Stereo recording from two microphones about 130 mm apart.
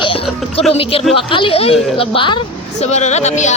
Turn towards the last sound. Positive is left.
turn(degrees=60)  # may be behind; listen again after turning